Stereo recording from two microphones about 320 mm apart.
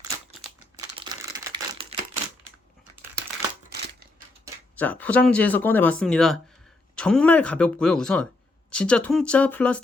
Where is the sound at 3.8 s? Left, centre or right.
Right.